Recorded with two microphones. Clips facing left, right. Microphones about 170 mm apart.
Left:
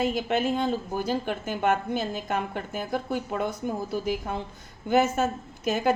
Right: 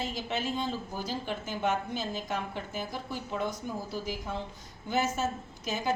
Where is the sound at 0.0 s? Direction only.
55° left (ahead or behind).